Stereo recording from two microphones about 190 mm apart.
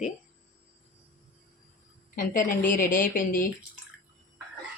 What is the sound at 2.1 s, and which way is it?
Speech, 45° left (ahead or behind).